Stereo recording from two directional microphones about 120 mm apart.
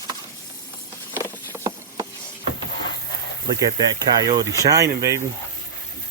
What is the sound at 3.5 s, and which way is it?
Speech, 35° right (ahead or behind).